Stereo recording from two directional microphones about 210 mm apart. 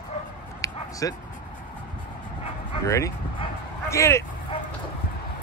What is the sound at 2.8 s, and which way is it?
Speech, 15° left (ahead or behind).